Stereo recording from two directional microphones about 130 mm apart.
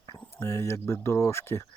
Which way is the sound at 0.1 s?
25° left (ahead or behind).